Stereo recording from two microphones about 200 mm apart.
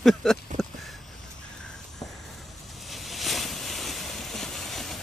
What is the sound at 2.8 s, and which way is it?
Ocean, centre (ahead or behind).